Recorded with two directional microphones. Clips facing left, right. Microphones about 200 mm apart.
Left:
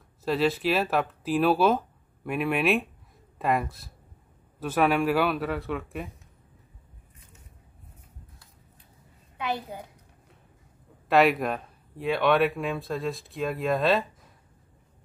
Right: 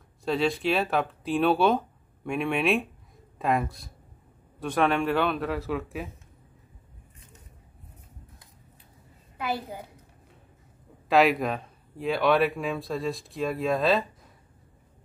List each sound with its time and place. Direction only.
0.2 s speech: centre (ahead or behind)
9.4 s a woman's voice: 5° right (ahead or behind)
11.1 s speech: centre (ahead or behind)